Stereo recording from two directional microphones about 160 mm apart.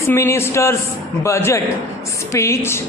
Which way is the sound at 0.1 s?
15° left (ahead or behind).